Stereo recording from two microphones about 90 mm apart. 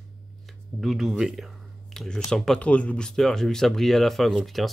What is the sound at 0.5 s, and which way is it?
Speech, centre (ahead or behind).